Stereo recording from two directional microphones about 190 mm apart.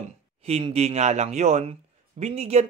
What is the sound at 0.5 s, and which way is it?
Speech, 35° right (ahead or behind).